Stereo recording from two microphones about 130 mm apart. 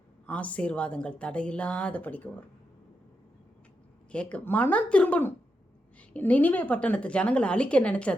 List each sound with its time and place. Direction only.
0.3 s a woman's voice: 10° left (ahead or behind)
4.1 s a woman's voice: 10° left (ahead or behind)